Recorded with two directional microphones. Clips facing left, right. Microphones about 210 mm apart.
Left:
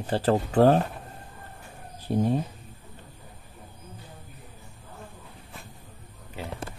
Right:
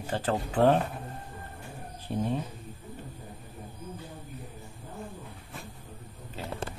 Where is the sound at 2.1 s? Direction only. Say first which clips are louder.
Left 6 dB; 40° left (ahead or behind).